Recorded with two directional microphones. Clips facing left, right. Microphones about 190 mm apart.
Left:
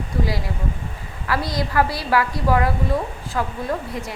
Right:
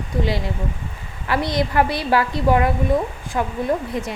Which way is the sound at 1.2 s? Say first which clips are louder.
Right 3 dB; 25° right (ahead or behind).